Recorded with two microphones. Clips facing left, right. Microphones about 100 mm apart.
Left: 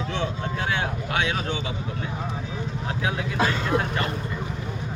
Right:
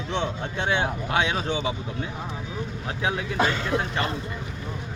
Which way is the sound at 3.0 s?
30° right (ahead or behind).